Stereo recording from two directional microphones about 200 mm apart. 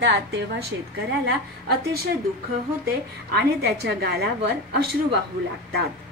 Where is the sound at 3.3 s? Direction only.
55° right (ahead or behind).